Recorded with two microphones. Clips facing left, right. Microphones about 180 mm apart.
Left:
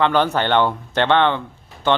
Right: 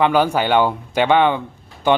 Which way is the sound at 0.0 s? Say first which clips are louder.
Right 2 dB; 10° right (ahead or behind).